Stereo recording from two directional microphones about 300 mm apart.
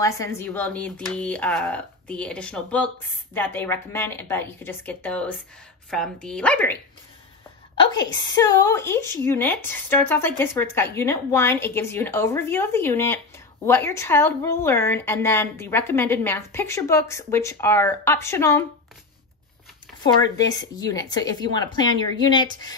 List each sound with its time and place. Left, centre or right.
0.0 s speech: centre
7.9 s speech: centre
20.0 s speech: centre